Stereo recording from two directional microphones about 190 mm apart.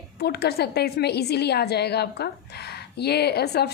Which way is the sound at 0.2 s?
60° left (ahead or behind).